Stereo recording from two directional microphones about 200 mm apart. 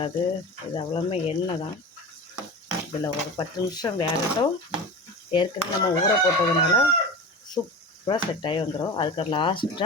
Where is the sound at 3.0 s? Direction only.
20° left (ahead or behind).